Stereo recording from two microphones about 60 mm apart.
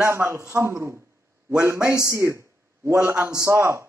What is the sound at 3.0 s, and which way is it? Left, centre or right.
Speech, right.